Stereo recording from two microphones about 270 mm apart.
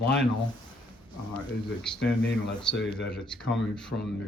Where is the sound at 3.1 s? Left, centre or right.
Centre.